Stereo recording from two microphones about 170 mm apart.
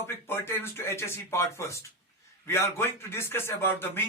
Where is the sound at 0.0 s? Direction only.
15° left (ahead or behind).